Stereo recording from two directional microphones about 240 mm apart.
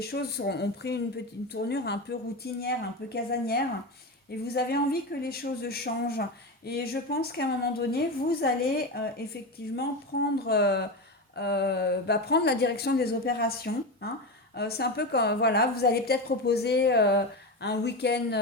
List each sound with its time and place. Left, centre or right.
0.0 s a woman's voice: left